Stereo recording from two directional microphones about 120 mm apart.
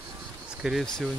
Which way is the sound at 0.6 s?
Centre (ahead or behind).